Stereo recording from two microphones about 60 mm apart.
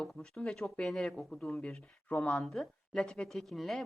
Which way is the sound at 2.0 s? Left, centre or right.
Left.